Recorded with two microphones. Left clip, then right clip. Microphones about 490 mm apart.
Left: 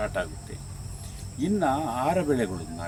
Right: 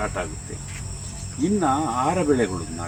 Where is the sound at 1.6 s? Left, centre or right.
Left.